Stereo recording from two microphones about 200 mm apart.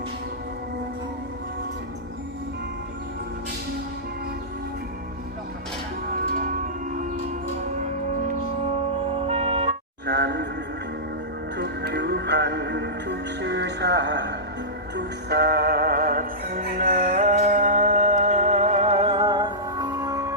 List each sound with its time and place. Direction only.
6.2 s music: 45° right (ahead or behind)
9.2 s music: 30° right (ahead or behind)
10.1 s a sound: 55° right (ahead or behind)
11.5 s music: 55° right (ahead or behind); by 20.3 s 15° right (ahead or behind)